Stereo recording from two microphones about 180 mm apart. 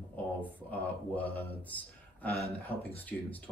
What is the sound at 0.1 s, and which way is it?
A man's voice, 10° left (ahead or behind).